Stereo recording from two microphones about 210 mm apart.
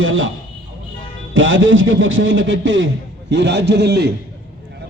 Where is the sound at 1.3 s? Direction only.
65° right (ahead or behind).